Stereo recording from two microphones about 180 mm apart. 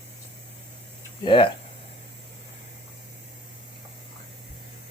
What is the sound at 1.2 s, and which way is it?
Speech, 25° left (ahead or behind).